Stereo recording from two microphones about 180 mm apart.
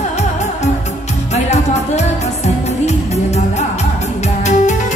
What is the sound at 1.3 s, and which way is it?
Music, 40° left (ahead or behind).